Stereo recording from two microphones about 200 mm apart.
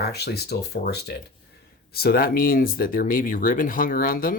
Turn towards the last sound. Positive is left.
turn(degrees=45)  # may be behind; listen again after turning